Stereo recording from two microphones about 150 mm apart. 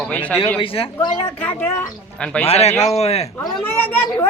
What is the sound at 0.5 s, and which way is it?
Speech, 40° left (ahead or behind).